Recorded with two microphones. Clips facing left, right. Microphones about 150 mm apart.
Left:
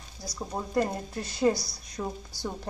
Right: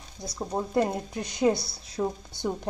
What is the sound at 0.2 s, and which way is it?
A woman's voice, 20° right (ahead or behind).